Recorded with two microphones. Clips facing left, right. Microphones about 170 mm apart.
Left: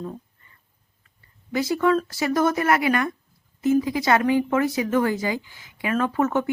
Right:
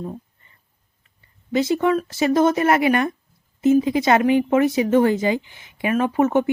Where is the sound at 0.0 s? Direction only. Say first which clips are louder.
Right 2 dB; 15° right (ahead or behind).